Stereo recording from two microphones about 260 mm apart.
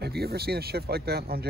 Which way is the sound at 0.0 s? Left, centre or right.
Right.